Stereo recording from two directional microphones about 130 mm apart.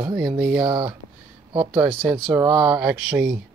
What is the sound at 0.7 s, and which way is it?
Speech, 35° right (ahead or behind).